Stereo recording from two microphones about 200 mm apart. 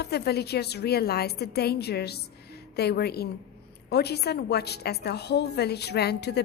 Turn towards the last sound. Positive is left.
turn(degrees=55)  # may be behind; listen again after turning